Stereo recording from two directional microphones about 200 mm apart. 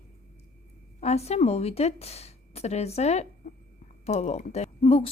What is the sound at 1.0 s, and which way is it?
A woman's voice, 30° left (ahead or behind).